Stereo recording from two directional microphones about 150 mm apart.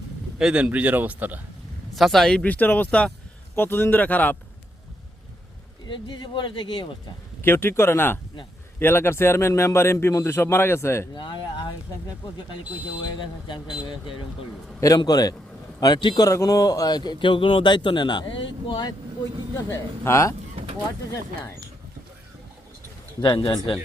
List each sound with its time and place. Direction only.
0.3 s speech: 5° right (ahead or behind)
2.0 s a man's voice: centre (ahead or behind)
5.8 s speech: 30° left (ahead or behind)
7.4 s a man's voice: 15° left (ahead or behind)
11.1 s speech: 30° left (ahead or behind)
13.1 s a man's voice: 30° left (ahead or behind)
19.7 s a man's voice: 20° left (ahead or behind)
23.2 s a man's voice: 30° left (ahead or behind)